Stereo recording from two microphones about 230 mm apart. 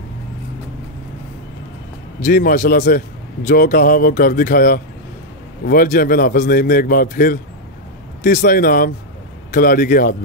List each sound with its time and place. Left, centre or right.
2.2 s a man's voice: left